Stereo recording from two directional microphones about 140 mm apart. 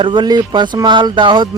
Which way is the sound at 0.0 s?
35° right (ahead or behind).